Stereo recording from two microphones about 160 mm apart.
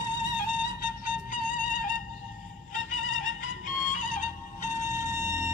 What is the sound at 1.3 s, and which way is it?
Music, 55° left (ahead or behind).